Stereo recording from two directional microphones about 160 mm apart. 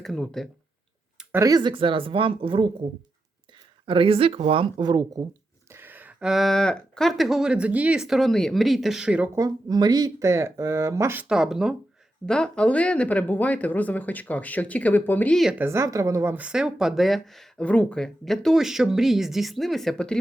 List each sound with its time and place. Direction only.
0.0 s speech: 5° left (ahead or behind)
1.2 s speech: 15° right (ahead or behind); by 2.6 s 35° right (ahead or behind)
3.8 s speech: 35° right (ahead or behind); by 9.3 s 5° right (ahead or behind)
9.3 s speech: 25° right (ahead or behind); by 15.5 s 5° left (ahead or behind)
15.5 s speech: 15° right (ahead or behind); by 20.1 s 5° left (ahead or behind)